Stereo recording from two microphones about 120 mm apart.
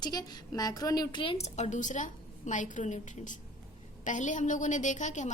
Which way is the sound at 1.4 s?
80° left.